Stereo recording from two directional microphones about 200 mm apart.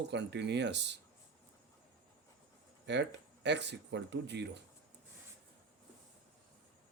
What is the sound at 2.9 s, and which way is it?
Speech, 60° right (ahead or behind).